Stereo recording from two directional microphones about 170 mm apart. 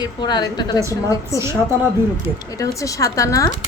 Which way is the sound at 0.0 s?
25° left (ahead or behind).